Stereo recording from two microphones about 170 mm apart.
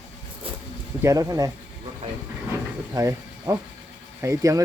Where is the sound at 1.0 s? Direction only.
20° right (ahead or behind).